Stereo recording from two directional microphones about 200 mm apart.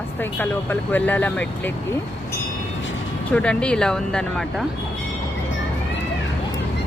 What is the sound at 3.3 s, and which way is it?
Speech, 5° left (ahead or behind).